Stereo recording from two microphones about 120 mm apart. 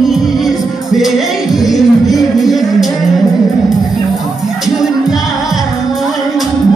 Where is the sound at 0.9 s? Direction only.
Centre (ahead or behind).